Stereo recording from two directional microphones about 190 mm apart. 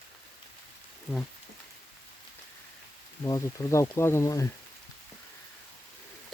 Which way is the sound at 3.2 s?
15° left (ahead or behind).